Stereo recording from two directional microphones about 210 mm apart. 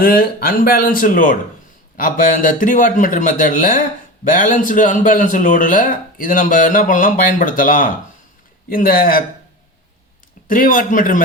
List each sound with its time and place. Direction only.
0.0 s speech: 45° left (ahead or behind)
10.5 s speech: 40° left (ahead or behind)